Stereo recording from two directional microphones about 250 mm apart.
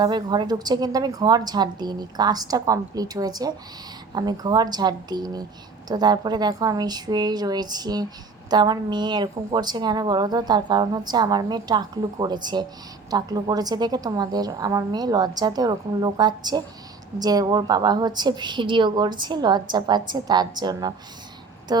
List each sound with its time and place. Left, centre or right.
0.0 s a woman's voice: centre